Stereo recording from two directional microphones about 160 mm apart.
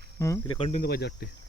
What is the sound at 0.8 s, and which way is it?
Speech, 90° left.